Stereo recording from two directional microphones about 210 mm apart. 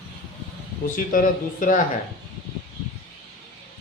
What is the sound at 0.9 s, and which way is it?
Speech, 40° left (ahead or behind).